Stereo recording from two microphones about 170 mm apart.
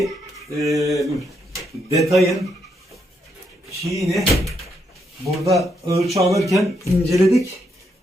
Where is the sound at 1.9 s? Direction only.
20° right (ahead or behind).